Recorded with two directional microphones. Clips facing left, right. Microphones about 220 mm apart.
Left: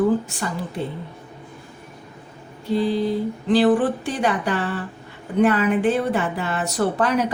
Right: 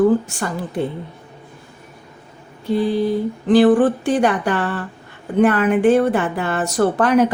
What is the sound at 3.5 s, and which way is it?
A woman's voice, 50° right (ahead or behind).